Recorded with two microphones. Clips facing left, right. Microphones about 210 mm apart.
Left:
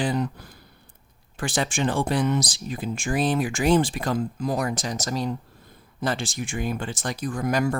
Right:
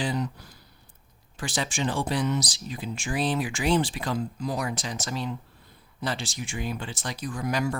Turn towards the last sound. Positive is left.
turn(degrees=50)  # may be behind; listen again after turning